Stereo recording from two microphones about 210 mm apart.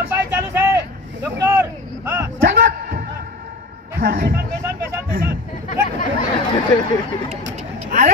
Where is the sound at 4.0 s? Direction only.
45° right (ahead or behind).